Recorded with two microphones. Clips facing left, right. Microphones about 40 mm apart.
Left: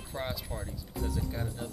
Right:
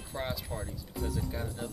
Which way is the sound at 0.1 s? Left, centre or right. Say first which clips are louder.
Even; centre.